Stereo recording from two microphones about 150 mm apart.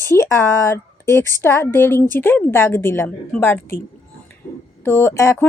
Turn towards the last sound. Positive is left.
turn(degrees=15)  # may be behind; listen again after turning